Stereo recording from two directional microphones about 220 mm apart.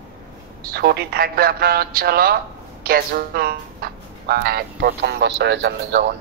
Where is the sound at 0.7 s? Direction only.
45° right (ahead or behind).